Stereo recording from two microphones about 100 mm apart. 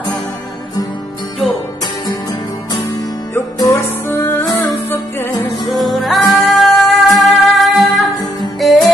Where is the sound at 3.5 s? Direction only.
35° left (ahead or behind).